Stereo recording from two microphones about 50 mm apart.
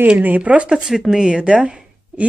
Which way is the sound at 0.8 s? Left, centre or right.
Centre.